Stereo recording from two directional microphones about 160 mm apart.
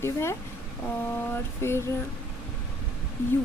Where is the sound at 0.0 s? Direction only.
15° left (ahead or behind).